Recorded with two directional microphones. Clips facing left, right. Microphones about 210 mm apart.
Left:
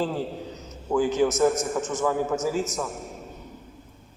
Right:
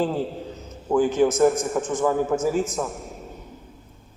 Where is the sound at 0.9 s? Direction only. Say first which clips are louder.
Right 3 dB; 50° right (ahead or behind).